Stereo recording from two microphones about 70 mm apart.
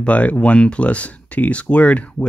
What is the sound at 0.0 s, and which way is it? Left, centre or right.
Speech, centre.